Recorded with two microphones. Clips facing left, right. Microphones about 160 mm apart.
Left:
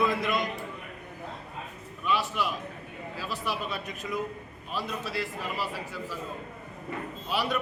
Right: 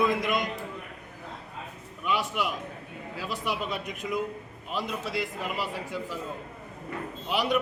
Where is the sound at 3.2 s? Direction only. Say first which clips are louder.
Right 2 dB; 15° right (ahead or behind).